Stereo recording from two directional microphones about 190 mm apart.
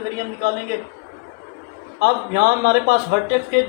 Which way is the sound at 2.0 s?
55° right (ahead or behind).